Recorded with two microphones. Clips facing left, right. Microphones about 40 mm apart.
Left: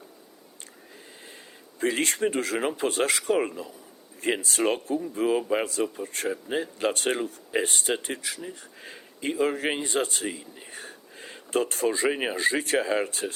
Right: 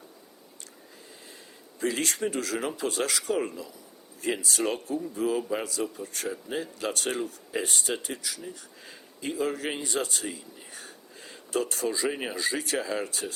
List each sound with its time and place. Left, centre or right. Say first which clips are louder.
1.8 s speech: left 3 dB; left
12.1 s speech: left 5 dB; left
12.4 s speech: left 5 dB; left